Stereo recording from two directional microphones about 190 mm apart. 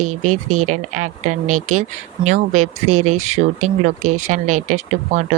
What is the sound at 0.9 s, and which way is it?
Speech, 40° right (ahead or behind).